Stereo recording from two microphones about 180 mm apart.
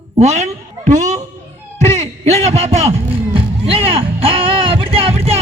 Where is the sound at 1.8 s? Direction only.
35° right (ahead or behind).